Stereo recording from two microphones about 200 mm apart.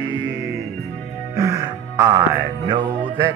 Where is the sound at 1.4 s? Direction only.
15° right (ahead or behind).